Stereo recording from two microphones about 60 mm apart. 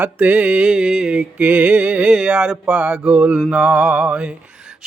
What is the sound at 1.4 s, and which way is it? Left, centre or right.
Mantra, right.